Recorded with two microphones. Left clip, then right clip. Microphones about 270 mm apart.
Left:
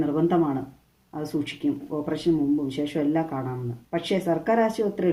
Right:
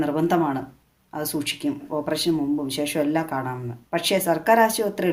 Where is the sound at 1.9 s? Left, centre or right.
Right.